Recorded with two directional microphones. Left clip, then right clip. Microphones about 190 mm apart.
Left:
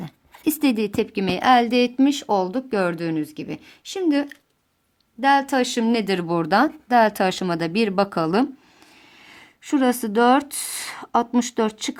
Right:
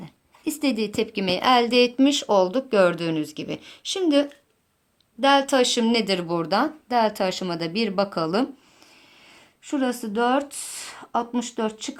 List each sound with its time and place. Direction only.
0.0 s a woman's voice: 40° left (ahead or behind)